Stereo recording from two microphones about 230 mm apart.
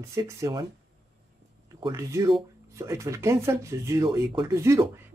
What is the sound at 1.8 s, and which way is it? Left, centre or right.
Speech, centre.